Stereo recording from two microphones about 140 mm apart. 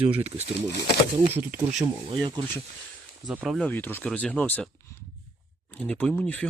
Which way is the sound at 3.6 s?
10° left (ahead or behind).